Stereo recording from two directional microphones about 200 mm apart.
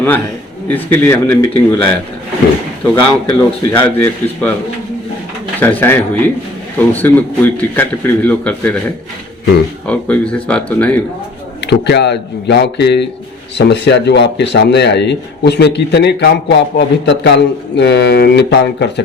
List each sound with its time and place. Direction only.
0.7 s a man's voice: 10° left (ahead or behind)
2.9 s a man's voice: 10° left (ahead or behind)
5.5 s a man's voice: 10° left (ahead or behind)
9.8 s a man's voice: 5° left (ahead or behind)
11.6 s speech: 60° left (ahead or behind)